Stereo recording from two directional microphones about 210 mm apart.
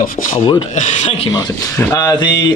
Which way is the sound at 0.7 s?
30° left (ahead or behind).